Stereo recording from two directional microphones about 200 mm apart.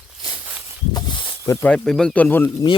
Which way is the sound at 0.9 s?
20° left (ahead or behind).